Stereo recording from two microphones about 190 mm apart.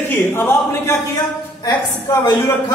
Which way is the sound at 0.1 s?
10° left (ahead or behind).